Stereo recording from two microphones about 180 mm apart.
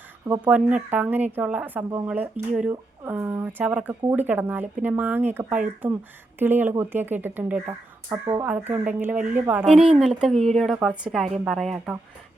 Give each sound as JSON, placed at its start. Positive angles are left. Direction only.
{"t": 0.3, "sound": "speech", "side_deg": -10}